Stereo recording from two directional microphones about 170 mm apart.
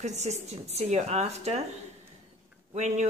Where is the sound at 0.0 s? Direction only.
40° right (ahead or behind).